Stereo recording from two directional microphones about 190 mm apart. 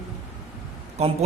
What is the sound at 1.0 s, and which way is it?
Speech, 35° right (ahead or behind).